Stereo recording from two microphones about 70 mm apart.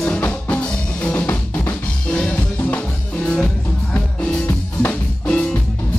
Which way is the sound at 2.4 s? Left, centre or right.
Left.